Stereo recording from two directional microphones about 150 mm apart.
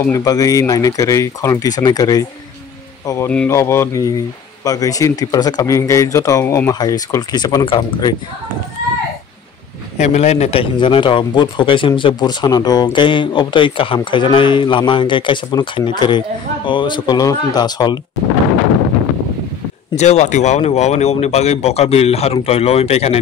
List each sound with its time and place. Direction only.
0.1 s speech: 25° left (ahead or behind)
3.3 s speech: 10° left (ahead or behind); by 8.1 s 30° left (ahead or behind)
9.9 s a man's voice: 50° left (ahead or behind); by 18.0 s 30° left (ahead or behind)
20.0 s speech: 50° left (ahead or behind)